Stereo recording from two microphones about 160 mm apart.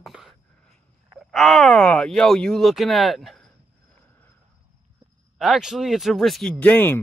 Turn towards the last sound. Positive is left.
turn(degrees=10)  # may be behind; listen again after turning